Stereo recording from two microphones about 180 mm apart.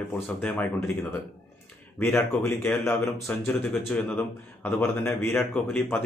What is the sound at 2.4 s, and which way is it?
Speech, 15° left (ahead or behind).